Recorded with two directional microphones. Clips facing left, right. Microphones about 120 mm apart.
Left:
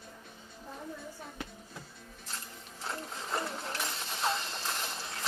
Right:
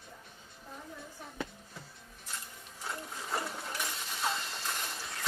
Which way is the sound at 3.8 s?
25° left (ahead or behind).